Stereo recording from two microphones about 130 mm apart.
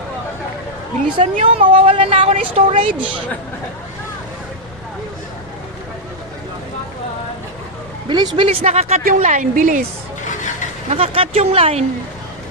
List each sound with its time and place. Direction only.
1.1 s a woman's voice: 45° right (ahead or behind)
8.0 s speech: 35° right (ahead or behind)
8.4 s a woman's voice: 55° right (ahead or behind); by 9.8 s 85° right
10.8 s a woman's voice: 50° right (ahead or behind)